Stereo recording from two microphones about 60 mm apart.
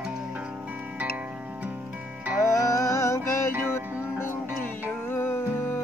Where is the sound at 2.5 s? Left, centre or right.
Left.